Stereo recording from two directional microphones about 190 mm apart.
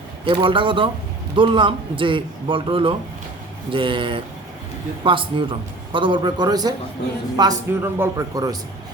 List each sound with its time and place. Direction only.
0.3 s a man's voice: 25° right (ahead or behind)